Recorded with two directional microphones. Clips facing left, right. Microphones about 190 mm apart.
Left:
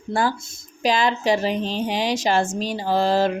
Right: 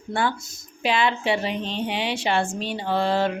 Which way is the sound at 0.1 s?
40° left (ahead or behind).